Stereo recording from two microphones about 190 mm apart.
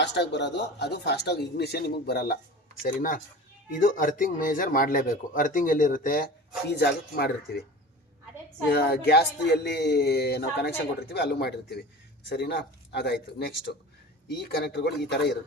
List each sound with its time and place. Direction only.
0.0 s speech: 65° left (ahead or behind)
2.8 s a man's voice: 45° left (ahead or behind)
6.7 s speech: 55° left (ahead or behind)
8.7 s speech: 55° left (ahead or behind)